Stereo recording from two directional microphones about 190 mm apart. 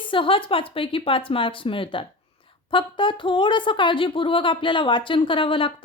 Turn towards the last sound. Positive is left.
turn(degrees=25)  # may be behind; listen again after turning